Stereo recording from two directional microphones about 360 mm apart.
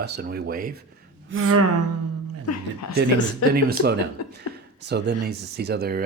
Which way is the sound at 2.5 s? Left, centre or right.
Left.